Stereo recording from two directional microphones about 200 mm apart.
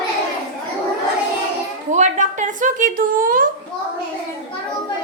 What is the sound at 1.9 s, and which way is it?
Speech, 35° right (ahead or behind).